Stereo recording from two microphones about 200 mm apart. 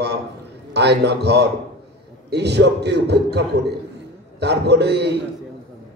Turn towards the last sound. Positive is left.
turn(degrees=-55)  # may be behind; listen again after turning